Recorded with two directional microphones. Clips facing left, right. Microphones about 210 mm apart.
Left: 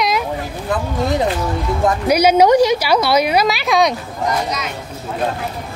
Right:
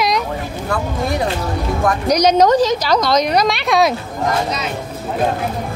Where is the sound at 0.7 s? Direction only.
20° left (ahead or behind).